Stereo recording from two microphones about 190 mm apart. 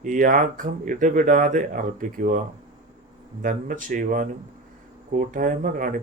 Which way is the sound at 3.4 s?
45° right (ahead or behind).